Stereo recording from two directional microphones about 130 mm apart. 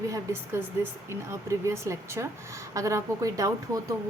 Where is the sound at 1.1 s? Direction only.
20° right (ahead or behind).